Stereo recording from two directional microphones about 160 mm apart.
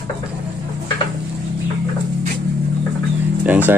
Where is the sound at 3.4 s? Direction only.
10° right (ahead or behind).